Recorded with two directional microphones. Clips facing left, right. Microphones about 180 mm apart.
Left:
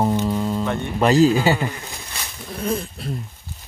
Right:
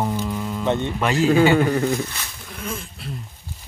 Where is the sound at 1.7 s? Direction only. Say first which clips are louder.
Right 13 dB; 60° right (ahead or behind).